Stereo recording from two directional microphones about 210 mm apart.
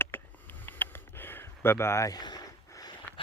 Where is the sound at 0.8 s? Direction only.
10° left (ahead or behind).